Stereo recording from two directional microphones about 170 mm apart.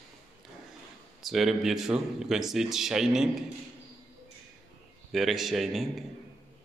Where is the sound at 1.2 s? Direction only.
Centre (ahead or behind).